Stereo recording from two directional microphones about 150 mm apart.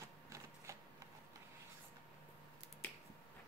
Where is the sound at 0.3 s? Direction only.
20° right (ahead or behind).